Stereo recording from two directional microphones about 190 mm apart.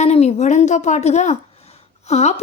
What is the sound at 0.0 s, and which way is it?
A woman's voice, 35° left (ahead or behind).